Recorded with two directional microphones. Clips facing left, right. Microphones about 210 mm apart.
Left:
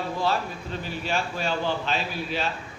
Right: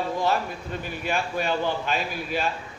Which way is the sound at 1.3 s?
15° right (ahead or behind).